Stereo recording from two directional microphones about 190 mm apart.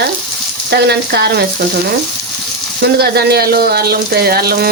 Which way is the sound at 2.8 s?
55° right (ahead or behind).